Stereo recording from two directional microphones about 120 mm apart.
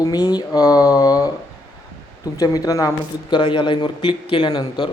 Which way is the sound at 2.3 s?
30° left (ahead or behind).